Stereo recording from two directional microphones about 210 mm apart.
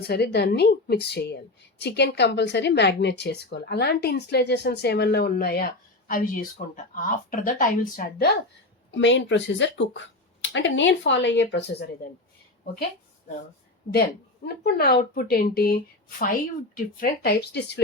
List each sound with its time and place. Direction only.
0.1 s a woman's voice: 50° left (ahead or behind)
8.9 s speech: 60° left (ahead or behind)
14.4 s a woman's voice: 45° left (ahead or behind)